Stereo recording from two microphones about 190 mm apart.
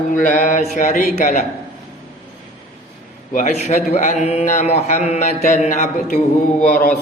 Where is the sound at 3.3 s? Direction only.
45° left (ahead or behind).